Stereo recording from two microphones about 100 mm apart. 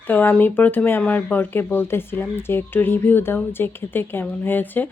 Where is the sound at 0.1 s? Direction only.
20° left (ahead or behind).